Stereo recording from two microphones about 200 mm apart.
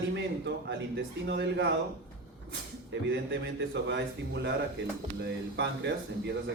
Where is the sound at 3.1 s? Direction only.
65° right (ahead or behind).